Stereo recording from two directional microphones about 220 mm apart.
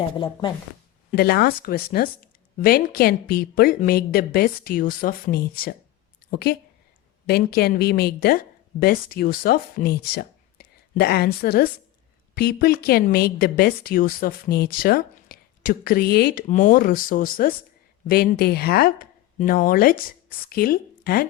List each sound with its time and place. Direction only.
1.1 s a woman's voice: 45° left (ahead or behind)